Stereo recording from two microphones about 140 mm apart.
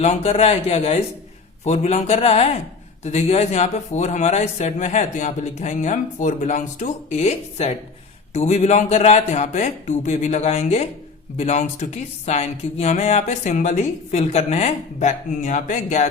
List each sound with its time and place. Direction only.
0.0 s a man's voice: 50° left (ahead or behind)